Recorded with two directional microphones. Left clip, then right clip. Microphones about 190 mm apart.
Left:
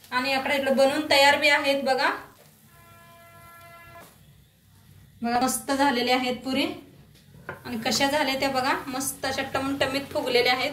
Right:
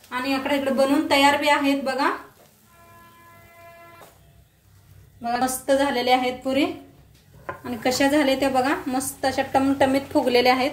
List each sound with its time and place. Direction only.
0.1 s a woman's voice: 40° right (ahead or behind)
5.2 s a woman's voice: 30° right (ahead or behind)